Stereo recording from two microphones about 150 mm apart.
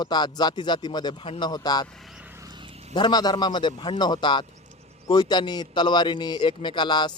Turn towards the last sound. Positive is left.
turn(degrees=30)  # may be behind; listen again after turning